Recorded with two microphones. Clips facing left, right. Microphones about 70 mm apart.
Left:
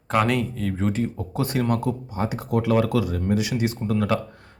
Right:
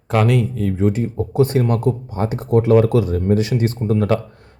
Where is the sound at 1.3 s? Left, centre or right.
Right.